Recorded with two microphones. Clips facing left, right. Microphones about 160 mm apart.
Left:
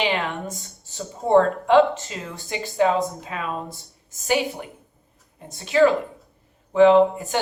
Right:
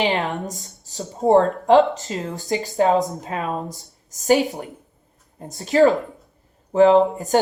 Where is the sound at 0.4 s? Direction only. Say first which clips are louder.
Right 2 dB; 40° right (ahead or behind).